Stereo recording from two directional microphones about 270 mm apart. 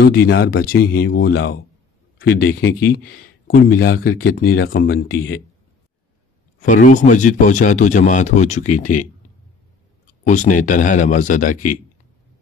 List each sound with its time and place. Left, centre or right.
0.0 s speech: left
6.6 s speech: left
10.2 s speech: left